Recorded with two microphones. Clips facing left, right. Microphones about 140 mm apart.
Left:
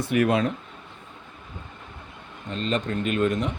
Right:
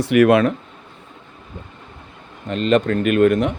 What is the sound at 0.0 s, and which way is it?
Speech, 75° right (ahead or behind).